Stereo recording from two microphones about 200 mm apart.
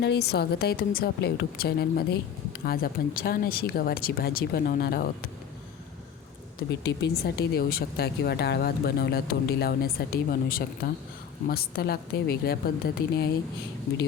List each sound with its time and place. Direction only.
0.0 s speech: 55° left (ahead or behind)
6.7 s speech: 55° left (ahead or behind)